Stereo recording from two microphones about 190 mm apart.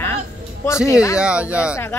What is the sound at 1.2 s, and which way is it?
Speech, 5° right (ahead or behind).